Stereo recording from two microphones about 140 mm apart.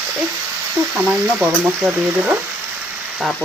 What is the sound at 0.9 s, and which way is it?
Speech, 15° right (ahead or behind).